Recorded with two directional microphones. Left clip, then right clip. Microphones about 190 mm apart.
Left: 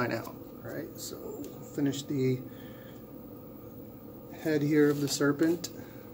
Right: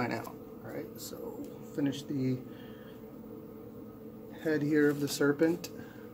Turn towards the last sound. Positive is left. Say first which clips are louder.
# left 1 dB
turn(degrees=-15)  # may be behind; listen again after turning